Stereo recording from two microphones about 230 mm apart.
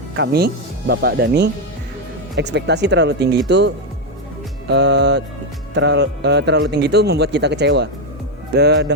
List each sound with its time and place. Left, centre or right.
0.2 s a man's voice: right
4.7 s a man's voice: right